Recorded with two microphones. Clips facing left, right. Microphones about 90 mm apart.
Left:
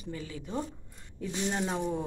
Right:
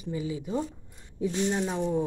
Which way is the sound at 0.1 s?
15° right (ahead or behind).